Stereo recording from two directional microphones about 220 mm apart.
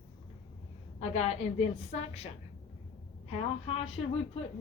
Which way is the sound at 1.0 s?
30° left (ahead or behind).